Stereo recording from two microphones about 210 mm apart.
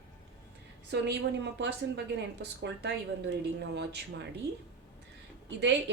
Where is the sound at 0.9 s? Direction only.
55° right (ahead or behind).